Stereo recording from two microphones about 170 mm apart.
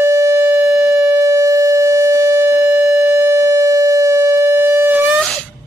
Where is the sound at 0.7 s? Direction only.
Centre (ahead or behind).